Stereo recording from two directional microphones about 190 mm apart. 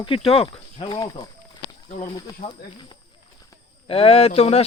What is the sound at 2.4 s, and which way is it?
Speech, 25° left (ahead or behind).